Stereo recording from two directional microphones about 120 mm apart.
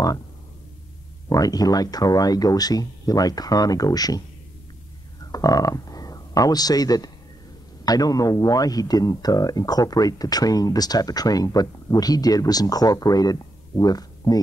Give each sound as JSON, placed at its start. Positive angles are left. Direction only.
{"t": 1.3, "sound": "speech", "side_deg": 30}
{"t": 5.3, "sound": "speech", "side_deg": 30}